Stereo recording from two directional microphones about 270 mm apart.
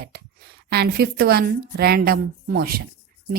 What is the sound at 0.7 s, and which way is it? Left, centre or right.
A woman's voice, right.